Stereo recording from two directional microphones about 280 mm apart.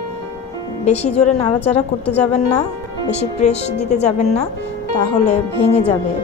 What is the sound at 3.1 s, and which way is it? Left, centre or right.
Speech, left.